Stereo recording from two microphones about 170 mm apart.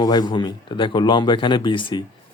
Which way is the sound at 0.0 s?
25° left (ahead or behind).